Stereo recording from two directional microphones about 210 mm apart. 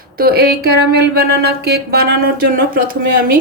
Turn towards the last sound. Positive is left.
turn(degrees=-40)  # may be behind; listen again after turning